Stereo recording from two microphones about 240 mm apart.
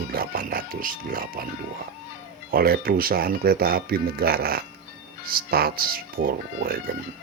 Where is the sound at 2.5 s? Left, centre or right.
Right.